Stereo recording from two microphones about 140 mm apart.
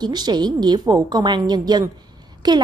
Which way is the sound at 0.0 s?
30° right (ahead or behind).